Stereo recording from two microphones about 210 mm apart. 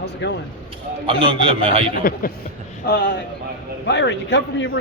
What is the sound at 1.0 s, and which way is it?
Speech, 25° right (ahead or behind).